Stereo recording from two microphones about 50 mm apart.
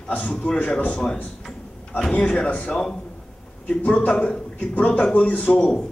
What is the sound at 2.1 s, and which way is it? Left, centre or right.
Speech, left.